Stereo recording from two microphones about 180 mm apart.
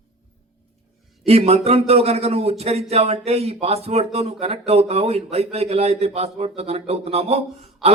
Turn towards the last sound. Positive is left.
turn(degrees=-35)  # may be behind; listen again after turning